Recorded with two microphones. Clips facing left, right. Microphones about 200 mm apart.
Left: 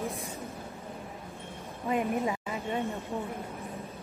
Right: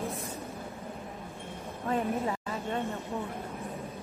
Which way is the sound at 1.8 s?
10° left (ahead or behind).